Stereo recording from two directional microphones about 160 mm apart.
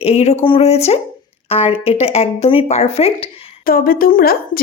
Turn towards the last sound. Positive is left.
turn(degrees=65)  # may be behind; listen again after turning